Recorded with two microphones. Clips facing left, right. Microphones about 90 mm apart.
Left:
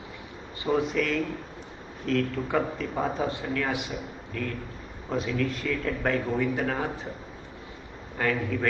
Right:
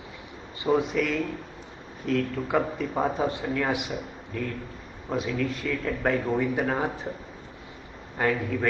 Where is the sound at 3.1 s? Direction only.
20° right (ahead or behind).